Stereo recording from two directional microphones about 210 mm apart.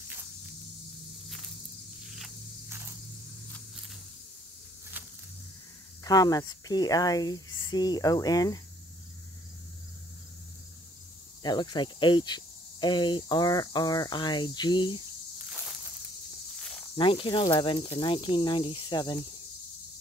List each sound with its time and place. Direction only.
6.0 s speech: 20° left (ahead or behind)
11.4 s speech: 20° left (ahead or behind)
16.9 s speech: 25° left (ahead or behind)